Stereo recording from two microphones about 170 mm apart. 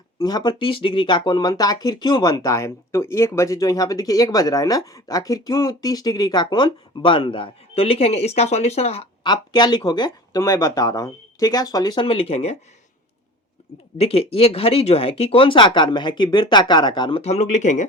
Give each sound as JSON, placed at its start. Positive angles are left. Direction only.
{"t": 0.2, "sound": "speech", "side_deg": 25}
{"t": 9.2, "sound": "speech", "side_deg": 25}
{"t": 14.0, "sound": "speech", "side_deg": 35}